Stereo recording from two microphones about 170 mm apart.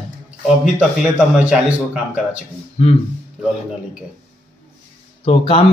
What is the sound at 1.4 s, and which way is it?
Speech, 10° right (ahead or behind).